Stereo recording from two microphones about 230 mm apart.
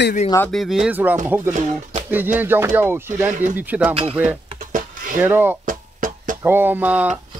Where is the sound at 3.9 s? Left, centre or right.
Right.